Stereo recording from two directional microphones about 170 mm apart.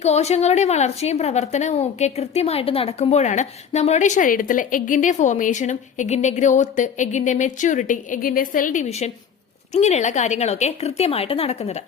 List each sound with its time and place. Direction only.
0.0 s a woman's voice: 40° left (ahead or behind)